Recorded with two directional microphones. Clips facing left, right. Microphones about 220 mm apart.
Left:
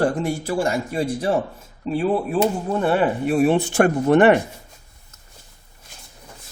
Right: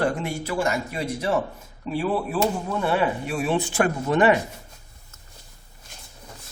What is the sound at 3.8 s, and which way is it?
Speech, 60° left (ahead or behind).